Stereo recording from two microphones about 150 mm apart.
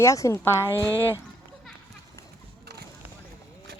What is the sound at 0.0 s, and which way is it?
Speech, 20° left (ahead or behind).